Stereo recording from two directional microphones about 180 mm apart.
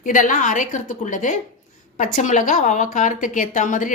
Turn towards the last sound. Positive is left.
turn(degrees=45)  # may be behind; listen again after turning